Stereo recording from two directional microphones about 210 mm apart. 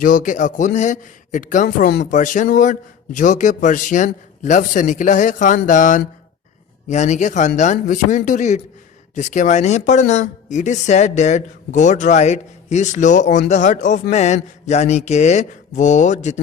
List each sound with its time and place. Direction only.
0.0 s speech: 40° left (ahead or behind)
2.0 s speech: 35° left (ahead or behind)